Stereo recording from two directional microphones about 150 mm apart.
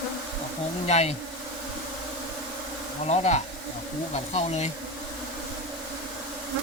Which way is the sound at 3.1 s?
50° left (ahead or behind).